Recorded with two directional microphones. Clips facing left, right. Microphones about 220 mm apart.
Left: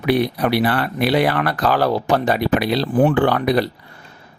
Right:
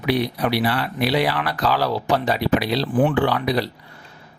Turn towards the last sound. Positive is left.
turn(degrees=50)  # may be behind; listen again after turning